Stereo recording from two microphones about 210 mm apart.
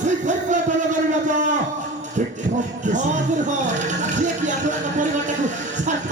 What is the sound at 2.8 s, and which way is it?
Music, 35° right (ahead or behind).